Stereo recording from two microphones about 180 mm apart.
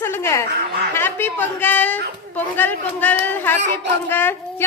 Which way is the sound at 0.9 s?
10° left (ahead or behind).